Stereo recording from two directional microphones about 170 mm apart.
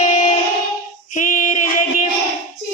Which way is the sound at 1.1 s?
50° left (ahead or behind).